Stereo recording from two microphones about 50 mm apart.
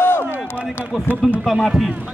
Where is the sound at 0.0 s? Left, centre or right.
Left.